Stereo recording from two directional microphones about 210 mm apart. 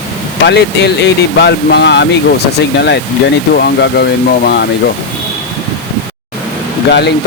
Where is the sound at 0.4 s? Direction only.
55° left (ahead or behind).